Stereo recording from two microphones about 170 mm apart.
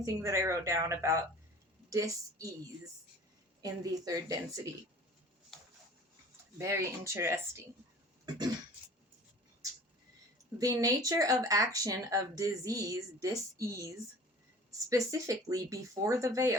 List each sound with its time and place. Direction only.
0.0 s speech: 20° right (ahead or behind)
6.6 s speech: 15° right (ahead or behind)
10.6 s speech: 20° right (ahead or behind)